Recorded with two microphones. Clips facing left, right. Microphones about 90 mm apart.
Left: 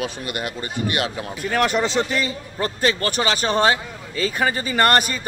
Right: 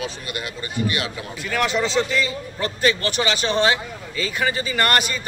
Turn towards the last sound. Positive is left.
turn(degrees=40)  # may be behind; listen again after turning